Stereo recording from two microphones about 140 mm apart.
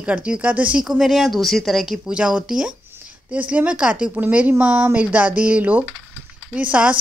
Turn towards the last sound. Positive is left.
turn(degrees=-10)  # may be behind; listen again after turning